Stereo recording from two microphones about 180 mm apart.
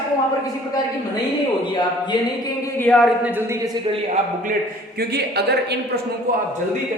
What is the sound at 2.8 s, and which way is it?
Speech, 5° left (ahead or behind).